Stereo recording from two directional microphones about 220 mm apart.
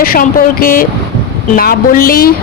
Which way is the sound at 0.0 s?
40° left (ahead or behind).